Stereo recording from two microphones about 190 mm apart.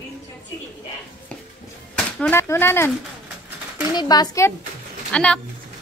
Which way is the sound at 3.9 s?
20° left (ahead or behind).